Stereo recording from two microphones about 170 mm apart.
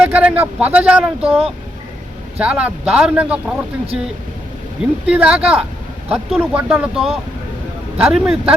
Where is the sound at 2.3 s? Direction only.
5° right (ahead or behind).